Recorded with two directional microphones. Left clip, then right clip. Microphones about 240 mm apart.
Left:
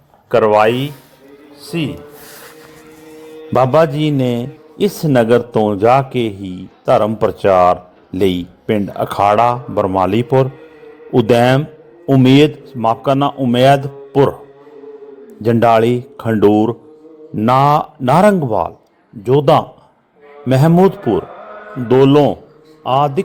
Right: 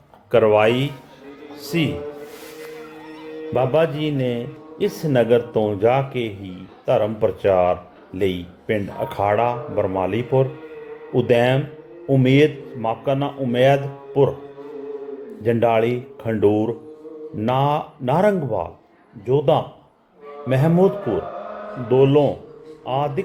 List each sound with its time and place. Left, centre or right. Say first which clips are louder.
0.3 s speech: left 4 dB; centre
1.6 s a sound: left 1 dB; centre
3.5 s a man's voice: left 7 dB; left
15.4 s a man's voice: left 7 dB; left